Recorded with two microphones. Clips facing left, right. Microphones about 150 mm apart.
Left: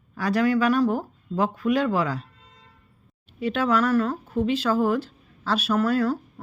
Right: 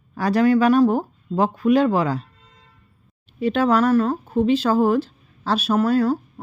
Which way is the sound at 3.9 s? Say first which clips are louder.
Right 4 dB; 20° right (ahead or behind).